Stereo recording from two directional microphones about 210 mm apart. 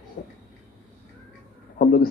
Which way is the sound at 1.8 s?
45° left (ahead or behind).